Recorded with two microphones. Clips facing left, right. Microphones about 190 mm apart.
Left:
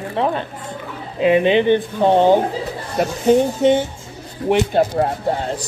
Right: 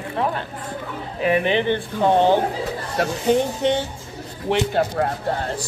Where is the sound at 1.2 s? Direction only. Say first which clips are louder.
Left 5 dB; 20° left (ahead or behind).